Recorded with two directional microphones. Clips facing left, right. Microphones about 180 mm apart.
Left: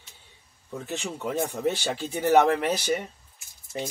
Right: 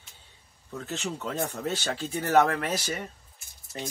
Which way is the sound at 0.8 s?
15° left (ahead or behind).